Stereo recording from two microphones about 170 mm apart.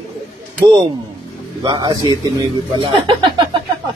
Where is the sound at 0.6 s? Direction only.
20° right (ahead or behind).